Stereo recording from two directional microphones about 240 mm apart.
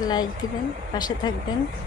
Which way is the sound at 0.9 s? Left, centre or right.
Centre.